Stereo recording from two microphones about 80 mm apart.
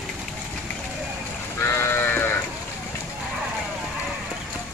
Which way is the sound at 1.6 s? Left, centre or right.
Left.